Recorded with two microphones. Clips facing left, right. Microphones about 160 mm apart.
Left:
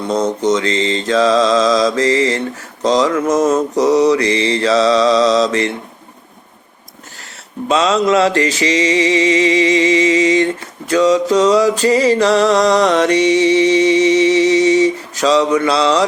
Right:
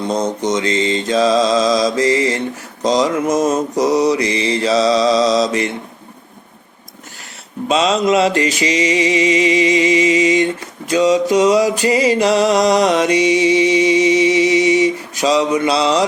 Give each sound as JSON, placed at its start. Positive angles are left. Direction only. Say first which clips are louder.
{"t": 0.0, "sound": "mantra", "louder": "left 2 dB", "side_deg": -15}
{"t": 7.7, "sound": "mantra", "louder": "left 1 dB", "side_deg": -20}